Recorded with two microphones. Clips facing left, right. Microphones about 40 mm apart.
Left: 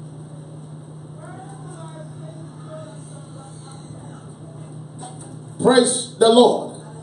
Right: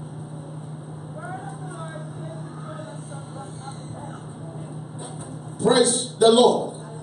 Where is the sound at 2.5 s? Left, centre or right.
Right.